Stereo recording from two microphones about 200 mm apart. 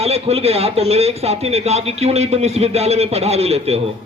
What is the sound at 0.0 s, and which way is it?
A man's voice, 30° right (ahead or behind).